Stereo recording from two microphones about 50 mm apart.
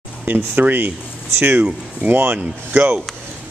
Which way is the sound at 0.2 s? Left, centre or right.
Right.